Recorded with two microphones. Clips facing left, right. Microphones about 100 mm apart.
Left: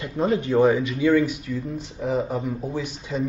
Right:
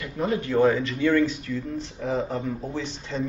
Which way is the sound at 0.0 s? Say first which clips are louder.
Left 4 dB; 25° left (ahead or behind).